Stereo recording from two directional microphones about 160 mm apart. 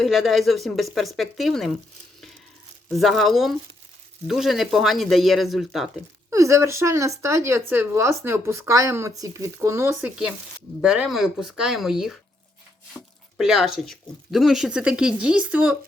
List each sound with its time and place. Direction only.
0.0 s speech: centre (ahead or behind)
2.9 s speech: centre (ahead or behind)
6.3 s a woman's voice: 20° right (ahead or behind)
10.8 s speech: 5° right (ahead or behind)